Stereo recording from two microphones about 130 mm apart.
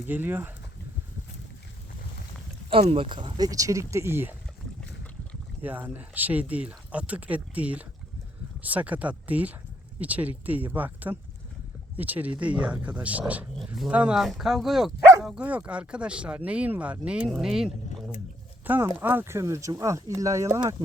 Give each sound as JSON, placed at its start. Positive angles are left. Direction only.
{"t": 0.1, "sound": "speech", "side_deg": -15}
{"t": 2.8, "sound": "speech", "side_deg": -45}
{"t": 5.6, "sound": "speech", "side_deg": -15}
{"t": 18.6, "sound": "speech", "side_deg": -15}